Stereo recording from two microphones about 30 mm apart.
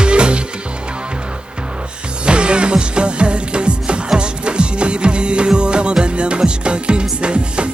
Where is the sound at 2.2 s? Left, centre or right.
Right.